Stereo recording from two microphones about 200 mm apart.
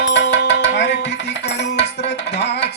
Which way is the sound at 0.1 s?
60° left (ahead or behind).